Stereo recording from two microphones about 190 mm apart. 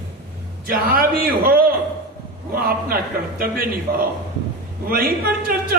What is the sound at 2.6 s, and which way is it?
Speech, 50° right (ahead or behind).